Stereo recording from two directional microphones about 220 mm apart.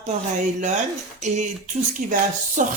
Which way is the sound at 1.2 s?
35° right (ahead or behind).